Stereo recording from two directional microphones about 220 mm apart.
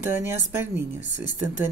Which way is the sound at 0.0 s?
10° right (ahead or behind).